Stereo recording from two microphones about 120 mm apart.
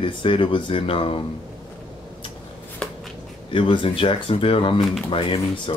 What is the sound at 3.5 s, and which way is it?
Speech, 45° left (ahead or behind).